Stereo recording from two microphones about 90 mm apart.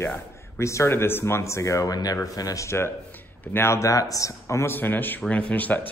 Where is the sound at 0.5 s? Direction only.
30° left (ahead or behind).